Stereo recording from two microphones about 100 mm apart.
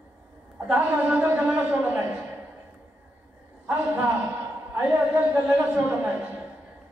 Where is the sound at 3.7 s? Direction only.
20° right (ahead or behind).